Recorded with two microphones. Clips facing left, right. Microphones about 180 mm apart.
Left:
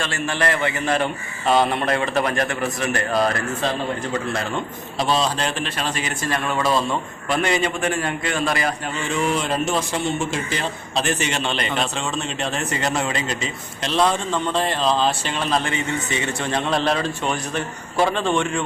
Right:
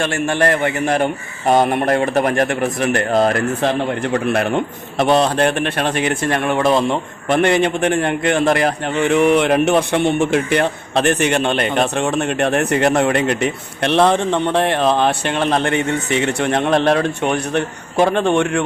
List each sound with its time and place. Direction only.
0.0 s a man's voice: 50° right (ahead or behind)
6.7 s speech: 20° right (ahead or behind)
7.3 s a man's voice: 60° right (ahead or behind)